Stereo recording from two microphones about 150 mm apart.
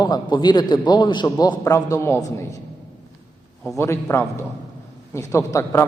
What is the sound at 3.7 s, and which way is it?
A man's voice, 15° left (ahead or behind).